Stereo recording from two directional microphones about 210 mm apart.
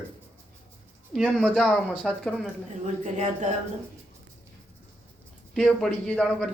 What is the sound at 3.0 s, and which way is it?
Speech, 35° right (ahead or behind).